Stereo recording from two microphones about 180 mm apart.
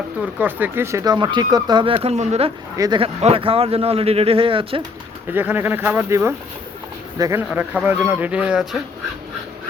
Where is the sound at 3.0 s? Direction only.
35° right (ahead or behind).